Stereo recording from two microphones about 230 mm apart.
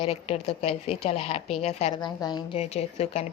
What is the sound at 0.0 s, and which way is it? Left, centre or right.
A woman's voice, left.